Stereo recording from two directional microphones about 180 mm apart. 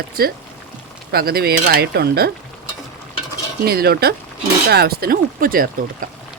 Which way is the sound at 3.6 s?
60° right (ahead or behind).